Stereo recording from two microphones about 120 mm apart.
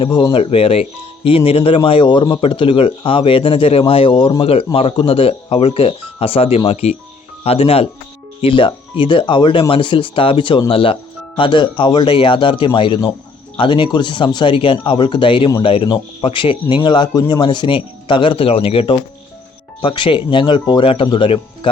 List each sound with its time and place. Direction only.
0.0 s speech: 40° left (ahead or behind)